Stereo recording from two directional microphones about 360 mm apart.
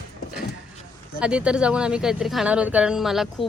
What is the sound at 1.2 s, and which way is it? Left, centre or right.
Speech, centre.